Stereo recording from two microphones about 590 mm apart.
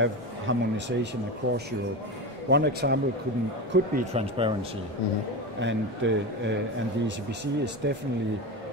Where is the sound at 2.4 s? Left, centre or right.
Centre.